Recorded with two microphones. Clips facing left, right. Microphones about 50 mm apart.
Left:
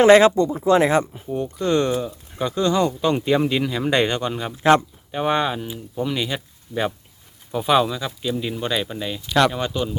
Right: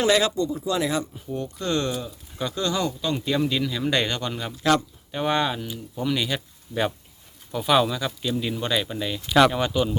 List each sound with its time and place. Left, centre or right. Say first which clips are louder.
0.0 s speech: left 9 dB; left
1.3 s speech: left 5 dB; centre
4.5 s speech: left 6 dB; left
5.1 s speech: left 3 dB; centre